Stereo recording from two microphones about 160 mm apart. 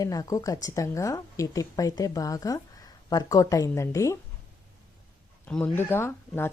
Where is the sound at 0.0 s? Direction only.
25° left (ahead or behind).